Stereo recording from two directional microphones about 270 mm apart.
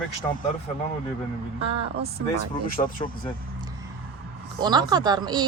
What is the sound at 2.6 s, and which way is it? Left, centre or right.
Speech, left.